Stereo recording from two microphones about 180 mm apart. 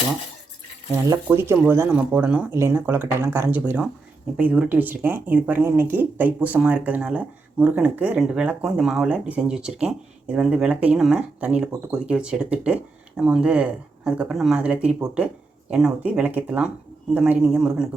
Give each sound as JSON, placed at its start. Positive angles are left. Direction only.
{"t": 1.0, "sound": "speech", "side_deg": -15}